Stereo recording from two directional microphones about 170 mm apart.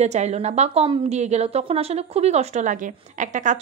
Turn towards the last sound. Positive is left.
turn(degrees=-45)  # may be behind; listen again after turning